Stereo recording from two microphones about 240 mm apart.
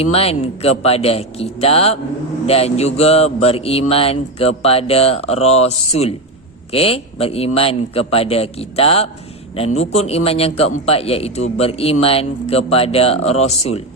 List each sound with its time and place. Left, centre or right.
0.0 s speech: left